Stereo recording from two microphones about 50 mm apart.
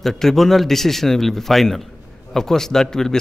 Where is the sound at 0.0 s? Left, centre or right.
Centre.